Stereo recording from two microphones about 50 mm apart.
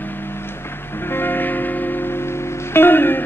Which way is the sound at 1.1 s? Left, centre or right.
Left.